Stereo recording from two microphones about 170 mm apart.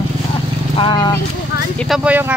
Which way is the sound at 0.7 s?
30° left (ahead or behind).